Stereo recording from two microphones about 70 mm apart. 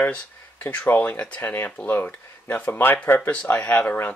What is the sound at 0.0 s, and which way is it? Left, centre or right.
Speech, left.